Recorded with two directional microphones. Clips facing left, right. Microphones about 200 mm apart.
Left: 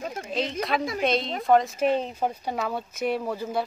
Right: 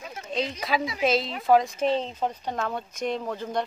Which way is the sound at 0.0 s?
50° left (ahead or behind).